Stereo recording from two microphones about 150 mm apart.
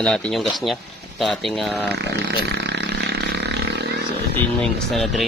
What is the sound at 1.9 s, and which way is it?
Speech, 90° right.